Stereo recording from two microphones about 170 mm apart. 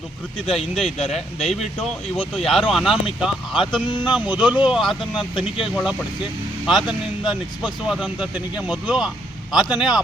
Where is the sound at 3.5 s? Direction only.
30° left (ahead or behind).